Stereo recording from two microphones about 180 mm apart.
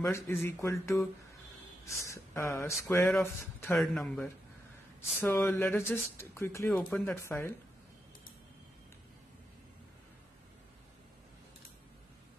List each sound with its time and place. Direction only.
0.0 s speech: 15° left (ahead or behind)
3.7 s speech: centre (ahead or behind)